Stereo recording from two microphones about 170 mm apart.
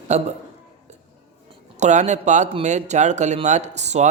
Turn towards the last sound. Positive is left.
turn(degrees=-40)  # may be behind; listen again after turning